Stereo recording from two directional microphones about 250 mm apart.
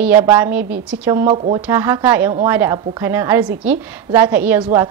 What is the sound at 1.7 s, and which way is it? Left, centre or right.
A woman's voice, centre.